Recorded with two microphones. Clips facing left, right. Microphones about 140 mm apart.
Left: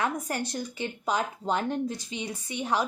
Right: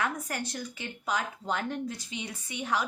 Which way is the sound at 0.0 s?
30° left (ahead or behind).